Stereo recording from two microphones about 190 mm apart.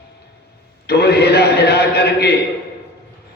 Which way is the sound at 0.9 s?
60° left (ahead or behind).